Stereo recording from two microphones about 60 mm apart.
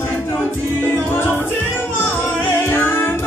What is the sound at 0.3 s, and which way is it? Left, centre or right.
Music, left.